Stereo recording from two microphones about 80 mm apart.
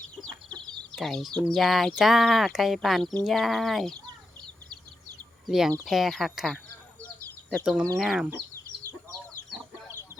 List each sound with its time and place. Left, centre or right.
0.9 s speech: centre
5.5 s speech: centre
7.6 s speech: centre
8.3 s bird: right